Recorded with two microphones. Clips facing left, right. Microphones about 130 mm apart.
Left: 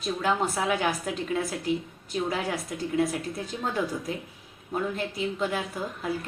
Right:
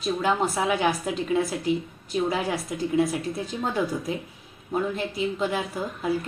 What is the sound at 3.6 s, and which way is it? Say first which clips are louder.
A woman's voice: right 2 dB; 15° right (ahead or behind).